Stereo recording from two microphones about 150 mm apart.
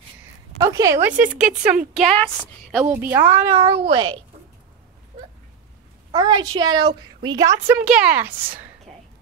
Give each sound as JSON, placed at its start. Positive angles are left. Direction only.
{"t": 0.6, "sound": "a woman's voice", "side_deg": -20}
{"t": 1.3, "sound": "a woman's voice", "side_deg": -5}
{"t": 2.1, "sound": "a woman's voice", "side_deg": 5}
{"t": 2.8, "sound": "a woman's voice", "side_deg": -15}
{"t": 3.4, "sound": "speech", "side_deg": -40}
{"t": 6.1, "sound": "a woman's voice", "side_deg": -25}
{"t": 7.8, "sound": "a woman's voice", "side_deg": -5}